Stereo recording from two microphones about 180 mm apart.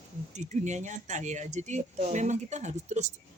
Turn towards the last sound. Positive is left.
turn(degrees=-40)  # may be behind; listen again after turning